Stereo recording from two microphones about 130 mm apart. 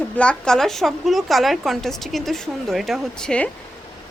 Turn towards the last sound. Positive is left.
turn(degrees=5)  # may be behind; listen again after turning